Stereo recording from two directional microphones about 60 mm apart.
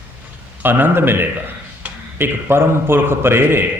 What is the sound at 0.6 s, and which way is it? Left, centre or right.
A man's voice, right.